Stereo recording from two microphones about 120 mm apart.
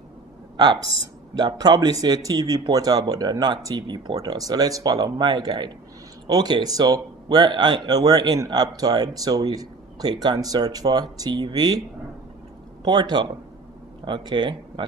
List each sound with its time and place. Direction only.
1.3 s speech: 35° right (ahead or behind)
12.8 s speech: 35° right (ahead or behind)